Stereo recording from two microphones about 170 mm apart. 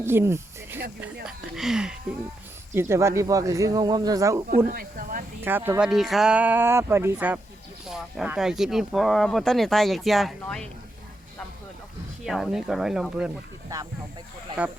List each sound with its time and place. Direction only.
0.0 s speech: 15° right (ahead or behind)
1.2 s speech: 5° right (ahead or behind)
2.7 s speech: 15° right (ahead or behind)
4.4 s speech: 60° right (ahead or behind)
5.4 s speech: 10° right (ahead or behind)
12.2 s speech: centre (ahead or behind)